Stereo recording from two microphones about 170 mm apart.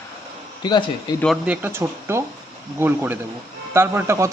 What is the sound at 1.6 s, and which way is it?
A man's voice, 15° right (ahead or behind).